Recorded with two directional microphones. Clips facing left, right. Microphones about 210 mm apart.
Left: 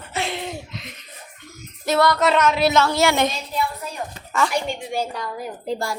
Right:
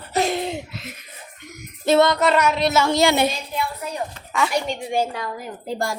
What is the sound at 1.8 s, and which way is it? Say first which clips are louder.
Child singing: right 3 dB; 25° right (ahead or behind).